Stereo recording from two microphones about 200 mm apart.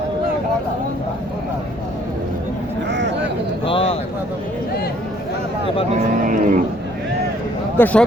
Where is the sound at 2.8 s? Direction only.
60° right (ahead or behind).